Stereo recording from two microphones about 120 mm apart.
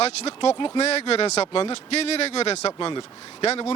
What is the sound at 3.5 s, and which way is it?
Speech, 55° left (ahead or behind).